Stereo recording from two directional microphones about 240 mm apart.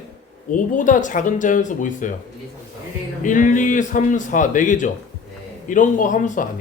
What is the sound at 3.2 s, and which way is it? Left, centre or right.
A man's voice, left.